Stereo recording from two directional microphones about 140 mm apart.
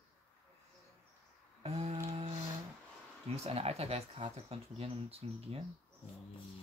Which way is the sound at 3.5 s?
45° right (ahead or behind).